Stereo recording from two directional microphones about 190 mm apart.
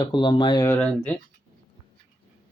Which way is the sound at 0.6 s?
5° left (ahead or behind).